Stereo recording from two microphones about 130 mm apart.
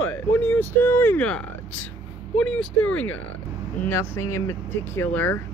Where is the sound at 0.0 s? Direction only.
15° left (ahead or behind).